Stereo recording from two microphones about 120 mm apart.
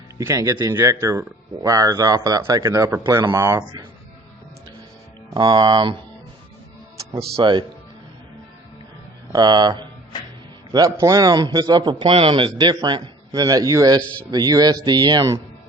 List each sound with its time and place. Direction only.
0.2 s speech: 25° right (ahead or behind)
5.3 s a man's voice: 40° right (ahead or behind)
7.3 s a man's voice: 40° right (ahead or behind)
9.3 s a man's voice: 35° right (ahead or behind)